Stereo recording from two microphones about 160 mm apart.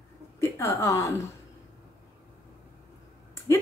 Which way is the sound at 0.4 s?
20° left (ahead or behind).